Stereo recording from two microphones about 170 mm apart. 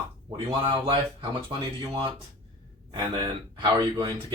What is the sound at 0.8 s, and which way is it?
Speech, 25° right (ahead or behind).